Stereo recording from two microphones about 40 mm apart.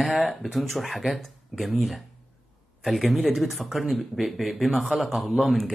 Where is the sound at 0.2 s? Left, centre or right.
Centre.